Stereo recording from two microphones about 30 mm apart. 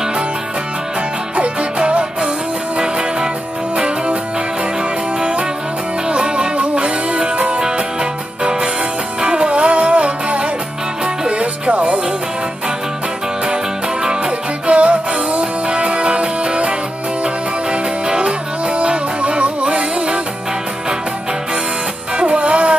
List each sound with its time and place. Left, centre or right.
1.3 s music: right
2.8 s music: right
6.0 s music: right
14.7 s music: right
18.0 s music: right
18.8 s music: right
22.1 s music: right